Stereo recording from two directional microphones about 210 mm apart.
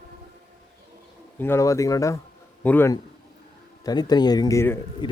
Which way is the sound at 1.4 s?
15° left (ahead or behind).